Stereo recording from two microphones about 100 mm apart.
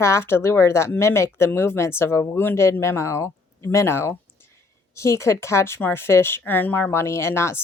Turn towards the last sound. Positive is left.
turn(degrees=25)  # may be behind; listen again after turning